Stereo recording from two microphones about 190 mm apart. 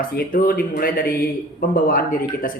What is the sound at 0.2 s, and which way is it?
Speech, 50° left (ahead or behind).